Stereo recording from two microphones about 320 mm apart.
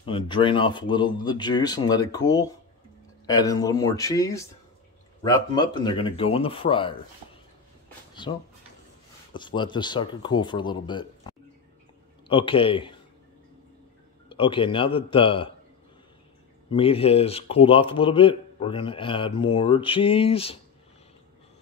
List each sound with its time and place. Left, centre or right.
0.0 s a man's voice: centre
8.2 s a man's voice: centre
14.3 s a man's voice: centre
16.7 s a man's voice: centre